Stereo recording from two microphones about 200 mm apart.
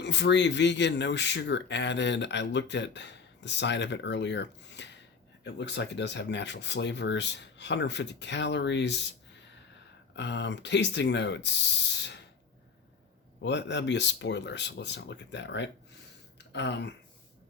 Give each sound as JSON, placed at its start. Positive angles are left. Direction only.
{"t": 0.0, "sound": "speech", "side_deg": 60}
{"t": 10.2, "sound": "speech", "side_deg": 60}
{"t": 13.4, "sound": "speech", "side_deg": 60}